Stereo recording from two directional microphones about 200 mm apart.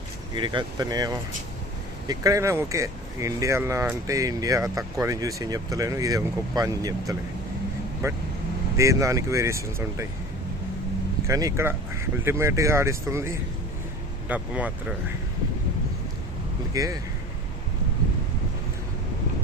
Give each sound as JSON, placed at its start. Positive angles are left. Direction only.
{"t": 0.3, "sound": "speech", "side_deg": -25}
{"t": 11.3, "sound": "speech", "side_deg": -15}
{"t": 16.7, "sound": "speech", "side_deg": -15}